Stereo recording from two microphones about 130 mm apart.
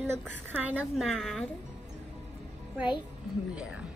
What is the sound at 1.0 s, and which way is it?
Speech, centre (ahead or behind).